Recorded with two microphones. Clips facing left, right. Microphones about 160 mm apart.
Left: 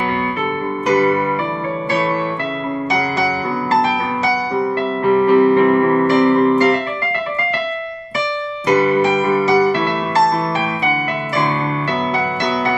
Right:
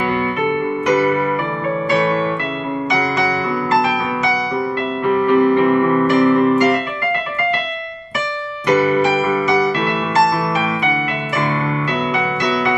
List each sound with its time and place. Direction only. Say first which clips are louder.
4.6 s music: left 2 dB; 30° left (ahead or behind)
9.3 s music: left 2 dB; 35° left (ahead or behind)